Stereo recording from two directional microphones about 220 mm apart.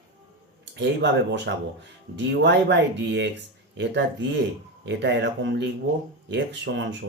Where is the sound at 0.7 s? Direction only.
50° right (ahead or behind).